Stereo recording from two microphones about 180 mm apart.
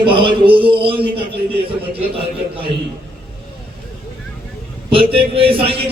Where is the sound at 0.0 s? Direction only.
30° right (ahead or behind).